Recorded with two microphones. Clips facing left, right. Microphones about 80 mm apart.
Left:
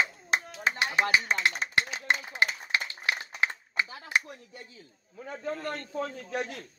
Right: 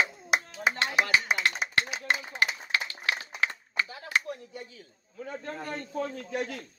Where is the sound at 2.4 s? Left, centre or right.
Left.